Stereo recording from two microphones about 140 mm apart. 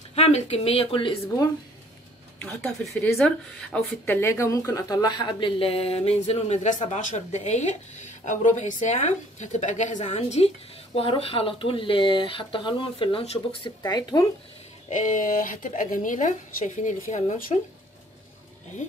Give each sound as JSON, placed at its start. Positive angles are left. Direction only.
{"t": 0.1, "sound": "speech", "side_deg": 45}
{"t": 1.2, "sound": "speech", "side_deg": 25}
{"t": 2.4, "sound": "speech", "side_deg": 0}
{"t": 13.7, "sound": "speech", "side_deg": 30}
{"t": 14.9, "sound": "a woman's voice", "side_deg": 65}